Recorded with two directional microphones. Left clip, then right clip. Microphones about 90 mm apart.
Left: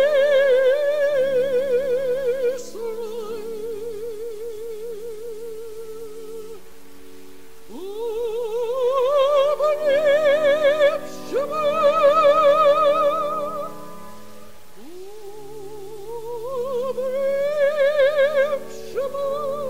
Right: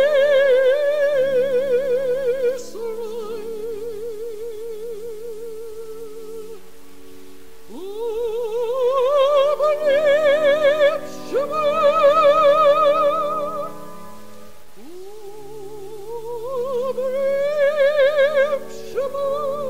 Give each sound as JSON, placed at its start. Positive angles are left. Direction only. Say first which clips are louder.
{"t": 0.0, "sound": "music", "louder": "right 1 dB", "side_deg": -20}
{"t": 7.8, "sound": "music", "louder": "right 2 dB", "side_deg": -20}
{"t": 16.5, "sound": "music", "louder": "right 2 dB", "side_deg": -25}